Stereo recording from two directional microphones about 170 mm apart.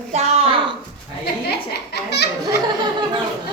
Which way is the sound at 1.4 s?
75° left (ahead or behind).